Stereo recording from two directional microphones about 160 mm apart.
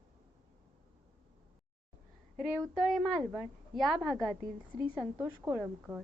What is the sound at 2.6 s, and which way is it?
A woman's voice, centre (ahead or behind).